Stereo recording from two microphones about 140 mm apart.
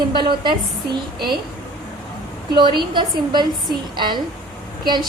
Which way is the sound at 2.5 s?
35° right (ahead or behind).